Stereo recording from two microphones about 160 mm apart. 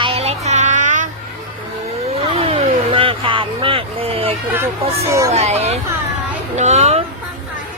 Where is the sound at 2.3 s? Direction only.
35° right (ahead or behind).